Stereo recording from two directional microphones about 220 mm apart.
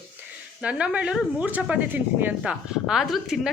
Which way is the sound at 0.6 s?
5° right (ahead or behind).